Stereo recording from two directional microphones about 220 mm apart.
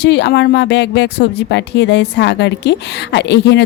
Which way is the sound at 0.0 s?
50° left (ahead or behind).